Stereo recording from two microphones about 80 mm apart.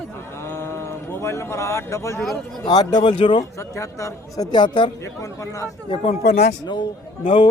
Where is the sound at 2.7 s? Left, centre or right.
Left.